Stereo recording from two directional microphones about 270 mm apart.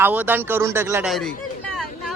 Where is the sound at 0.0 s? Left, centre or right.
Centre.